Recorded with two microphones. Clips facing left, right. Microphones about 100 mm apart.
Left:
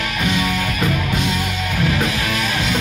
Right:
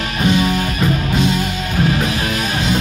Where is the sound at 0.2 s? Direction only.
35° right (ahead or behind).